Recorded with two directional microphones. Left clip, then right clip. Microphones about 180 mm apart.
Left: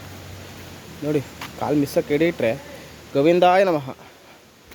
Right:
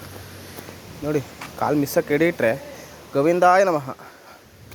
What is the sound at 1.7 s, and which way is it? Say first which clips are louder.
Speech: left 1 dB; 5° left (ahead or behind).